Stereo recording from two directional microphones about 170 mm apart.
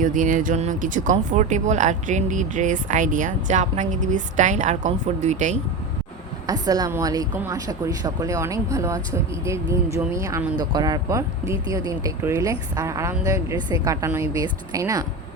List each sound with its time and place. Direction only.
0.0 s speech: 50° right (ahead or behind)
6.5 s a woman's voice: 20° right (ahead or behind)